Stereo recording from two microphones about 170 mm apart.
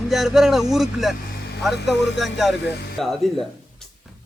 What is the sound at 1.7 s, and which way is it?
Speech, 85° left.